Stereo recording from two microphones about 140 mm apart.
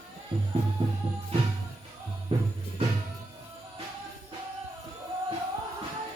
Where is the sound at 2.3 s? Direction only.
45° right (ahead or behind).